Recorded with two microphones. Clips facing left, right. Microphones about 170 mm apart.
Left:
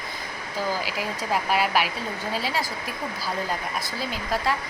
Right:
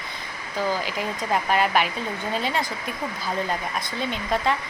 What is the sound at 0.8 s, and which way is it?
A woman's voice, 5° left (ahead or behind).